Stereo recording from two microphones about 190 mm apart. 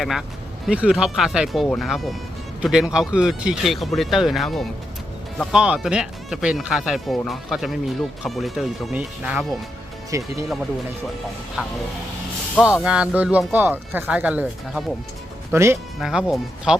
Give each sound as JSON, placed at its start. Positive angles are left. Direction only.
{"t": 0.0, "sound": "speech", "side_deg": 0}
{"t": 10.1, "sound": "speech", "side_deg": -15}
{"t": 11.6, "sound": "speech", "side_deg": -5}
{"t": 16.0, "sound": "speech", "side_deg": -5}